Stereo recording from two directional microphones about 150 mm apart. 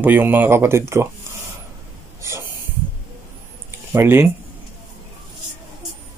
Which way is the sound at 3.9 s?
15° right (ahead or behind).